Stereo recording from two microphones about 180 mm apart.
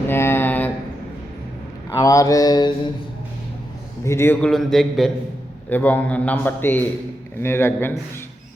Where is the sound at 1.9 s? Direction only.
20° left (ahead or behind).